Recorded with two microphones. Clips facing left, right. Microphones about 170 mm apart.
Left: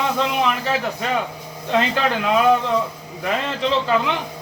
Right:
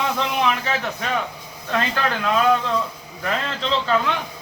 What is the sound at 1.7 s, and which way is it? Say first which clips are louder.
A man's voice: left 3 dB; 20° left (ahead or behind).